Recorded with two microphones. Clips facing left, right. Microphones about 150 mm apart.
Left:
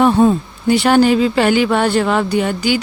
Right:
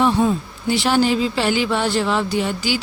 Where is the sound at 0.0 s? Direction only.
50° left (ahead or behind).